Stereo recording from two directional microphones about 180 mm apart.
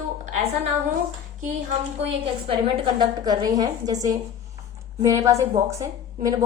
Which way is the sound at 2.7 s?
25° right (ahead or behind).